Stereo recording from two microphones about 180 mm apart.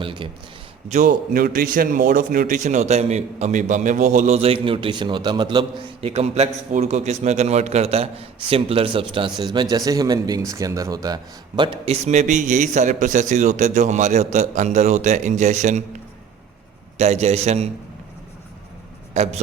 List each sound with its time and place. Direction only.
0.0 s a sound: 25° right (ahead or behind)
0.9 s a man's voice: 45° right (ahead or behind)
17.0 s a man's voice: 40° right (ahead or behind)
19.1 s a man's voice: 40° right (ahead or behind)